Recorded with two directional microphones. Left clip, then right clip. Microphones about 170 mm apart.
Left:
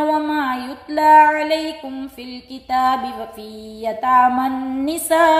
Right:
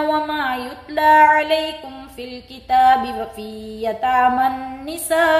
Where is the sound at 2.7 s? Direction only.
30° left (ahead or behind).